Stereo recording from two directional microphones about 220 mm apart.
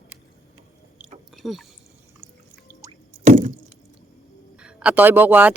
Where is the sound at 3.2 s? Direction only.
35° right (ahead or behind).